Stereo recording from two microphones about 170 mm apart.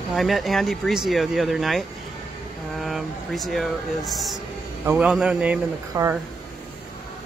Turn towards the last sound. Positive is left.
turn(degrees=-20)  # may be behind; listen again after turning